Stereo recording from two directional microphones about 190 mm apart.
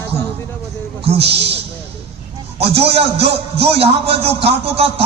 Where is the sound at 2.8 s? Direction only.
35° right (ahead or behind).